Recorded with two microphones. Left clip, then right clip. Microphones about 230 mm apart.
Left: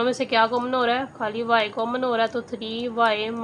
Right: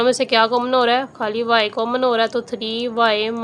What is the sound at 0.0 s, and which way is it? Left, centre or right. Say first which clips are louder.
A woman's voice: right 5 dB; right.